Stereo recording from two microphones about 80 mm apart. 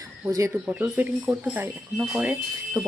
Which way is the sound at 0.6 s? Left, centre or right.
Right.